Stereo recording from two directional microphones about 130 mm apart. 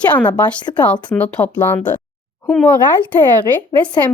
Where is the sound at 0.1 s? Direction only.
10° left (ahead or behind).